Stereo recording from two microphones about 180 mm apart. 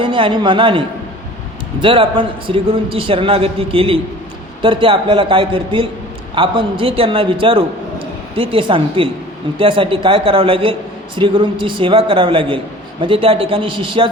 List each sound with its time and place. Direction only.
0.0 s a man's voice: 30° right (ahead or behind)